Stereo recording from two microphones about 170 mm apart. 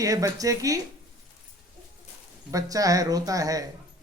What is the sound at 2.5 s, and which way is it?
Speech, 20° right (ahead or behind).